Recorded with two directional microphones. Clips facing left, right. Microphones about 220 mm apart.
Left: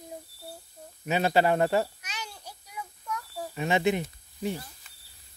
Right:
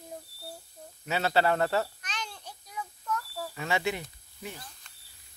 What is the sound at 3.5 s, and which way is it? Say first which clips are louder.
Speech: left 6 dB; 20° left (ahead or behind).